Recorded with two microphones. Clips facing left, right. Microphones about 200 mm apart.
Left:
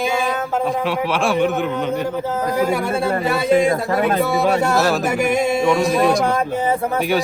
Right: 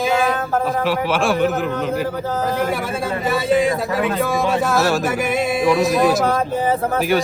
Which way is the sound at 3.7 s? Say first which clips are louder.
Left 2 dB; 50° left (ahead or behind).